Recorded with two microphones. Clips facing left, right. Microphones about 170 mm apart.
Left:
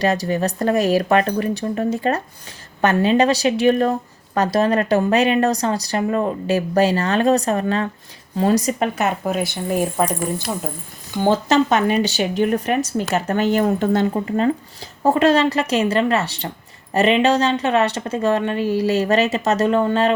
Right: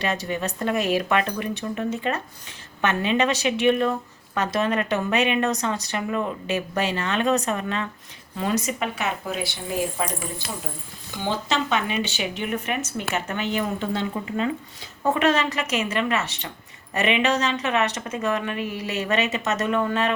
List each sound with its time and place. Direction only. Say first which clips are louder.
0.0 s speech: left 7 dB; 40° left (ahead or behind)